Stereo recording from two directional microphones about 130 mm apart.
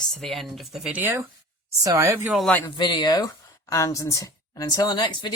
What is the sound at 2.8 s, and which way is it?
Speech, 35° left (ahead or behind).